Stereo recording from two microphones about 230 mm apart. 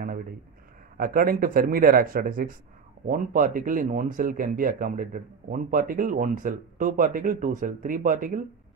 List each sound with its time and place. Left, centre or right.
0.9 s speech: right